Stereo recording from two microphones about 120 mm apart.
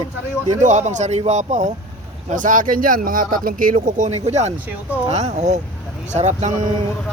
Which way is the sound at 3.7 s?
65° right (ahead or behind).